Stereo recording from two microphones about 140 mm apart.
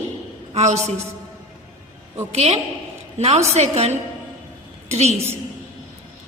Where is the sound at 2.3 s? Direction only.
50° right (ahead or behind).